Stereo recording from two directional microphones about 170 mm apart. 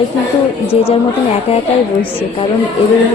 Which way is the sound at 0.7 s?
35° left (ahead or behind).